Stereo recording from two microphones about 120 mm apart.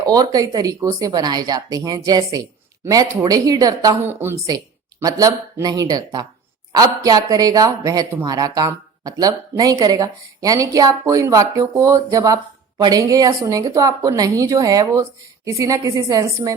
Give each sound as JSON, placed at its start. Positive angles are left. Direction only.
{"t": 0.0, "sound": "speech", "side_deg": -30}
{"t": 4.1, "sound": "speech", "side_deg": -20}